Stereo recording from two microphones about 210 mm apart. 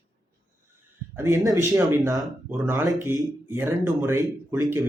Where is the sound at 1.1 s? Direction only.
15° right (ahead or behind).